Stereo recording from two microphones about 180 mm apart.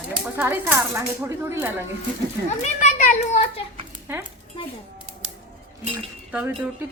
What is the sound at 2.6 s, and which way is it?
A child's voice, 40° left (ahead or behind).